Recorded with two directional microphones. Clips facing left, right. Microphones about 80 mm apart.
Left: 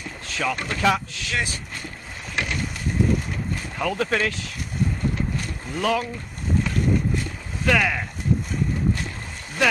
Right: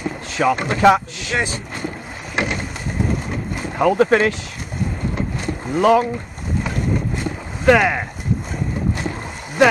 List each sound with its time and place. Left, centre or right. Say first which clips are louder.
0.0 s speech: right 8 dB; right
2.3 s boat: right 5 dB; right
3.3 s vehicle: right 4 dB; right
5.7 s speech: right 9 dB; right
7.2 s a sound: right 5 dB; right